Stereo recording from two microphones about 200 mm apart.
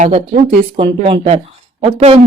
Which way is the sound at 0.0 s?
35° right (ahead or behind).